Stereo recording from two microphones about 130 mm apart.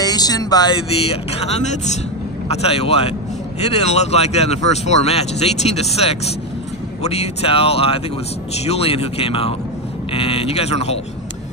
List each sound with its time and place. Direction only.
0.0 s speech: 30° left (ahead or behind)
1.0 s speech: 55° left (ahead or behind)
2.4 s speech: 50° left (ahead or behind)